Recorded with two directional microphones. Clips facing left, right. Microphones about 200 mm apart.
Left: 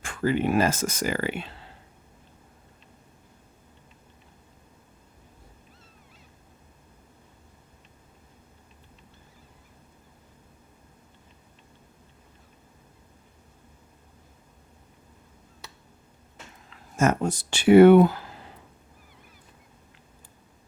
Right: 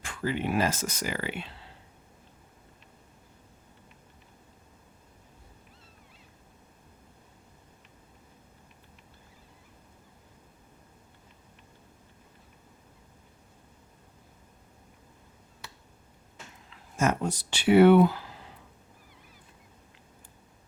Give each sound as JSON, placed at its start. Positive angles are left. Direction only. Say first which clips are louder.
{"t": 0.0, "sound": "speech", "louder": "left 6 dB", "side_deg": 50}
{"t": 16.6, "sound": "speech", "louder": "left 4 dB", "side_deg": 50}